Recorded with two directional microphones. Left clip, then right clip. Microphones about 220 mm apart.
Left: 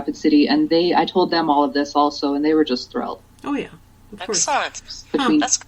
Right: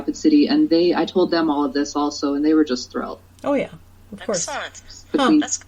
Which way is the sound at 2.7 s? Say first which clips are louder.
Left 2 dB; 45° left (ahead or behind).